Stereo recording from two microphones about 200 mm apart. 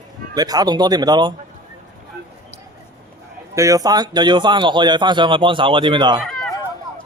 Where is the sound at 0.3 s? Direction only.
20° right (ahead or behind).